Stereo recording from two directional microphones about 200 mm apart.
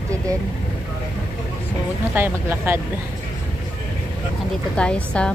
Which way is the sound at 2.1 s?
10° right (ahead or behind).